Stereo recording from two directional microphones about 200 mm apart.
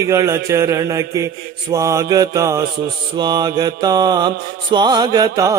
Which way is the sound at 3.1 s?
20° right (ahead or behind).